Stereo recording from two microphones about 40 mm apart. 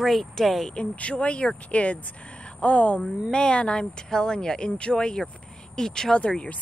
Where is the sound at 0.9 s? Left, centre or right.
Left.